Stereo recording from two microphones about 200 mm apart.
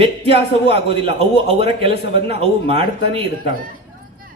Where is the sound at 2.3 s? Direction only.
30° right (ahead or behind).